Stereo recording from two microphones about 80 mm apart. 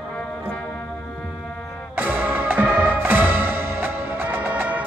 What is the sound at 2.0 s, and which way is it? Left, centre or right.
Music, right.